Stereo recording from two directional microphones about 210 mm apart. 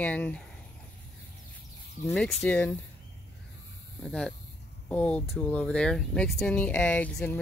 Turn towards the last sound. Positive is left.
turn(degrees=5)  # may be behind; listen again after turning